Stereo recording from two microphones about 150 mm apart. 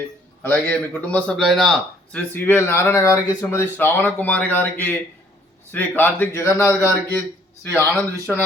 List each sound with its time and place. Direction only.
0.4 s a man's voice: 10° left (ahead or behind)
8.1 s speech: 15° right (ahead or behind)